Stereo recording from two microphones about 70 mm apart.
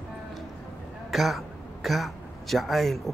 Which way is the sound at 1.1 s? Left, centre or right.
Centre.